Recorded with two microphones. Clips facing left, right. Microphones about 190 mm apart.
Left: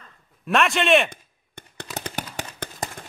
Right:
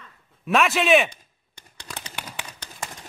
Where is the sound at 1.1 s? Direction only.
55° left (ahead or behind).